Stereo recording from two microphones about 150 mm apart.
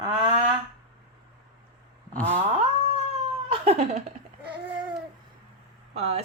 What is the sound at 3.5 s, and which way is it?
Giggle, 45° right (ahead or behind).